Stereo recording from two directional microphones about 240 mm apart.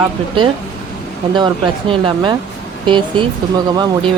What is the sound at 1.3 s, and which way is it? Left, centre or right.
Speech, right.